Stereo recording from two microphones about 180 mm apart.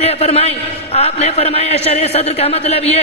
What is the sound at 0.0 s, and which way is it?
Speech, 35° left (ahead or behind).